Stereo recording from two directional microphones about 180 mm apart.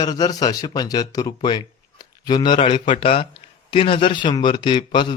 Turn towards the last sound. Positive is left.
turn(degrees=25)  # may be behind; listen again after turning